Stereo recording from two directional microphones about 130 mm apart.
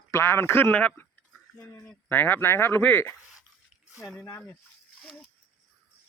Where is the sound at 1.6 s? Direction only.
25° left (ahead or behind).